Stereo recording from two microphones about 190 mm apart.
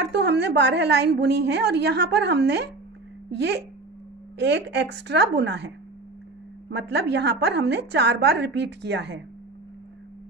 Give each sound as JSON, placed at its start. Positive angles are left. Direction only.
{"t": 0.0, "sound": "a woman's voice", "side_deg": -65}
{"t": 6.7, "sound": "a woman's voice", "side_deg": -60}